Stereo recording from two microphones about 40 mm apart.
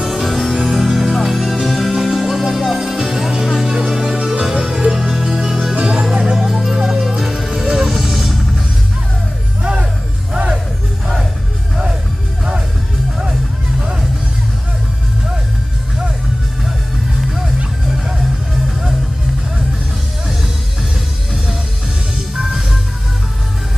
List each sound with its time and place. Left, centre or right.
0.1 s music: centre; by 6.0 s right
6.3 s music: centre
9.6 s music: right
13.3 s music: centre